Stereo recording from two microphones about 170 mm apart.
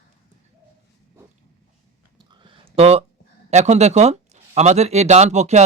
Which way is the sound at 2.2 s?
25° right (ahead or behind).